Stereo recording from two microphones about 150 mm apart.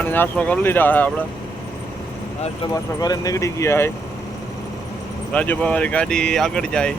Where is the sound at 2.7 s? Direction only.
25° left (ahead or behind).